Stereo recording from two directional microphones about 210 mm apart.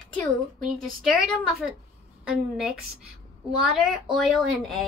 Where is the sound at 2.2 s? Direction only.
Centre (ahead or behind).